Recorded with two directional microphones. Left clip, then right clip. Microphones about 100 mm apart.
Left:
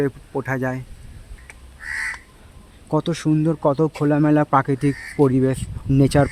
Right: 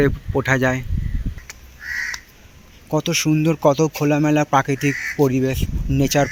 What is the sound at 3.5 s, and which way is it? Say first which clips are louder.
Speech: right 4 dB; centre (ahead or behind).